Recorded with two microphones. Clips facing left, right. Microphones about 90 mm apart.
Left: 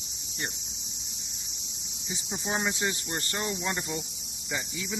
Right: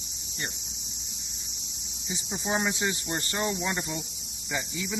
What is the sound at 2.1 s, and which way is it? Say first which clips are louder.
Speech: right 2 dB; 5° right (ahead or behind).